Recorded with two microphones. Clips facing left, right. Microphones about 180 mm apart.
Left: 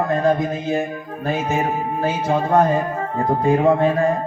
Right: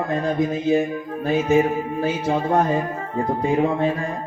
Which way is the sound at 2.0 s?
45° left (ahead or behind).